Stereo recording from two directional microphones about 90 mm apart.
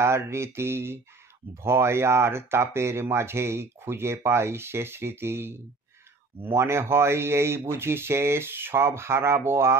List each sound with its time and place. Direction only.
0.0 s speech: 30° right (ahead or behind)